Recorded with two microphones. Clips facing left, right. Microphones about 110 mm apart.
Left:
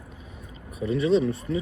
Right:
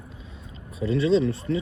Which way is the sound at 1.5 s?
15° left (ahead or behind).